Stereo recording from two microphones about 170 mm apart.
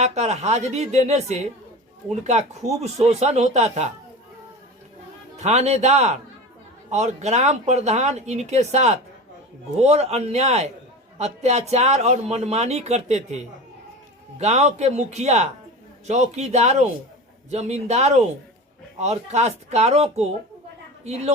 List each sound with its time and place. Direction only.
0.0 s speech: 40° right (ahead or behind)
2.8 s speech: 40° right (ahead or behind)
5.4 s speech: 40° right (ahead or behind)
14.3 s speech: 40° right (ahead or behind)